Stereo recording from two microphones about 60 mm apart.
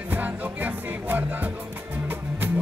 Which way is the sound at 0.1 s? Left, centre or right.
Right.